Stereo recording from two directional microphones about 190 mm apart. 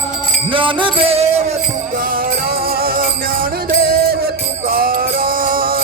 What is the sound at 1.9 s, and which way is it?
Music, 50° right (ahead or behind).